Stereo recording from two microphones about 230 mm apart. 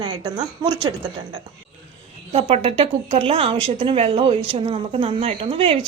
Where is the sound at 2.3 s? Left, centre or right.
Right.